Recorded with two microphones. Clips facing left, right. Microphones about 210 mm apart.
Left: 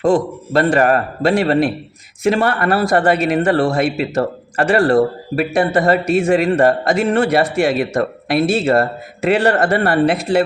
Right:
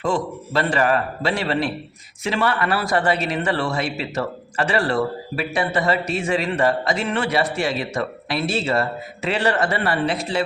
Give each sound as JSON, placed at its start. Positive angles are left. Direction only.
{"t": 0.0, "sound": "a man's voice", "side_deg": 50}